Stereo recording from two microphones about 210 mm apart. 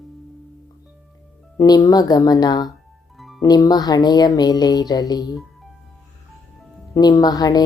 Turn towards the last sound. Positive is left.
turn(degrees=20)  # may be behind; listen again after turning